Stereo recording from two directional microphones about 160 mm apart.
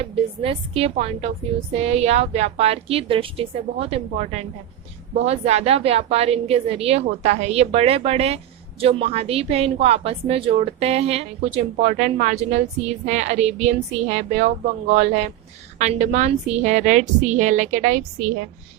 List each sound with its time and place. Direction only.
0.0 s a woman's voice: 35° right (ahead or behind)